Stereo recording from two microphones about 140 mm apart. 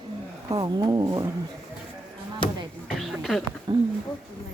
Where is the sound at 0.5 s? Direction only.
30° right (ahead or behind).